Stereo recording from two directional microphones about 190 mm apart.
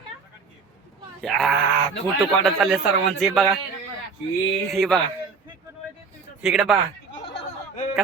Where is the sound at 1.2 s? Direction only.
Centre (ahead or behind).